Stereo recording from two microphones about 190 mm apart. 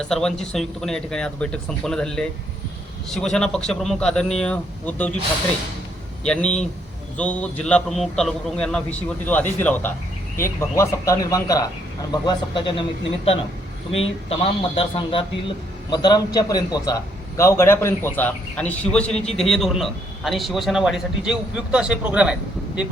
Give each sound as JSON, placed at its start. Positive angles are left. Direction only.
{"t": 0.0, "sound": "speech", "side_deg": 5}
{"t": 6.2, "sound": "a man's voice", "side_deg": 5}
{"t": 14.3, "sound": "a man's voice", "side_deg": 30}